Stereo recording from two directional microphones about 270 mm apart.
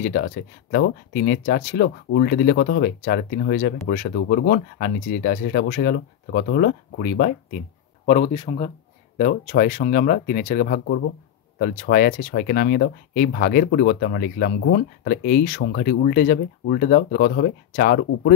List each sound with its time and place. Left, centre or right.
0.0 s speech: left